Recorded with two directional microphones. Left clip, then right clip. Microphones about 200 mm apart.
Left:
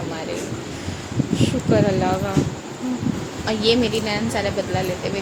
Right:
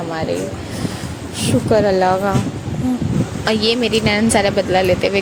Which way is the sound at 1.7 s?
25° right (ahead or behind).